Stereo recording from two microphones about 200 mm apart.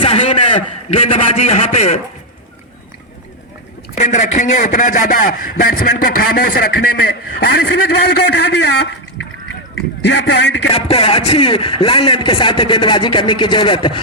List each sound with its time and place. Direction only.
0.0 s a man's voice: 25° left (ahead or behind)
3.9 s a man's voice: 35° left (ahead or behind)
8.1 s a man's voice: 55° left (ahead or behind)
10.0 s a man's voice: 60° left (ahead or behind)
10.8 s speech: 30° left (ahead or behind)